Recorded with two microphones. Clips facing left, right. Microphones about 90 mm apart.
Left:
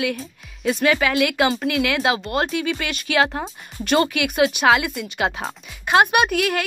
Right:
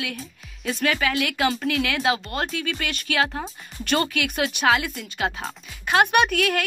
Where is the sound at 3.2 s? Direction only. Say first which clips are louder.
Left 3 dB; 35° left (ahead or behind).